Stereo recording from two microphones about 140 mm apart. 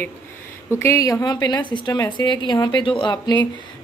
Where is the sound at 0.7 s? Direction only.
20° left (ahead or behind).